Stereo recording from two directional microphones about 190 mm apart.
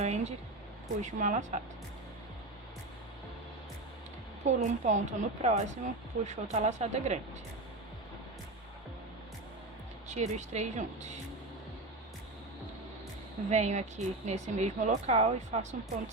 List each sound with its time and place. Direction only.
0.0 s music: 35° right (ahead or behind)
1.0 s a woman's voice: 40° right (ahead or behind)
4.4 s a woman's voice: 40° right (ahead or behind)
10.1 s a woman's voice: 35° right (ahead or behind)
13.5 s a woman's voice: 35° right (ahead or behind)